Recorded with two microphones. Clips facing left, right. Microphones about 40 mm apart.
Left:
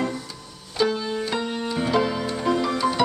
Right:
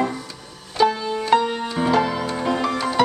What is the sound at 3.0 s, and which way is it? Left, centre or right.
Music, right.